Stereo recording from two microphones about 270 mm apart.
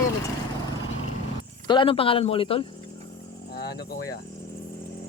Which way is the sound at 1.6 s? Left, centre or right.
Centre.